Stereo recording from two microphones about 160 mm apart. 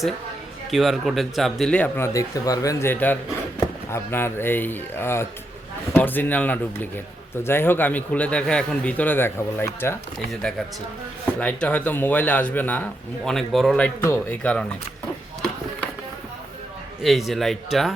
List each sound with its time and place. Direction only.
0.7 s speech: centre (ahead or behind)
2.1 s a man's voice: 20° left (ahead or behind)
11.3 s a man's voice: 10° left (ahead or behind)
17.0 s speech: centre (ahead or behind)